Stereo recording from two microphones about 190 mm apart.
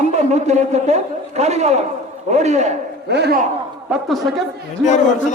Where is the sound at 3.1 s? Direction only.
60° right (ahead or behind).